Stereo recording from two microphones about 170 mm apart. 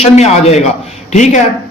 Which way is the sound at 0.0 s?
40° left (ahead or behind).